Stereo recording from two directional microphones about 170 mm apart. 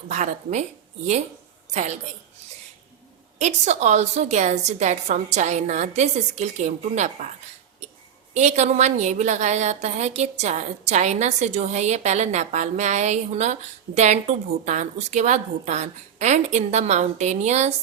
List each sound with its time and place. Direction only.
0.1 s a woman's voice: 45° right (ahead or behind)
1.7 s a woman's voice: 45° right (ahead or behind)
3.3 s a woman's voice: 40° right (ahead or behind)